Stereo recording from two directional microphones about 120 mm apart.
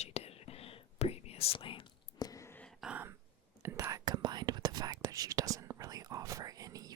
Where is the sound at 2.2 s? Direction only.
30° left (ahead or behind).